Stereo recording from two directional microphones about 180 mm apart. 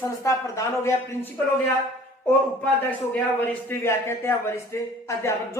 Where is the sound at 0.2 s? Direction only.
15° left (ahead or behind).